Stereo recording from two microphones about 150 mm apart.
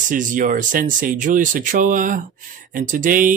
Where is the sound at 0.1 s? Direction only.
60° right (ahead or behind).